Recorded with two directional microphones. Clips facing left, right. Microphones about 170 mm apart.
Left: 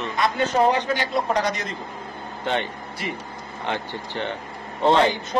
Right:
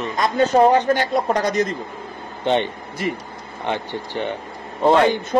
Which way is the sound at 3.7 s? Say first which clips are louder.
Right 4 dB; 15° right (ahead or behind).